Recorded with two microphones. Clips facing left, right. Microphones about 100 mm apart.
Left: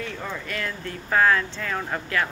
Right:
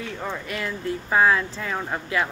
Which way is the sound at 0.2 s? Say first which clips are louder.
Right 1 dB; 15° right (ahead or behind).